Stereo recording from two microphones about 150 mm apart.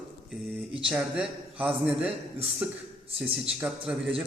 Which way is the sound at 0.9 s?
5° right (ahead or behind).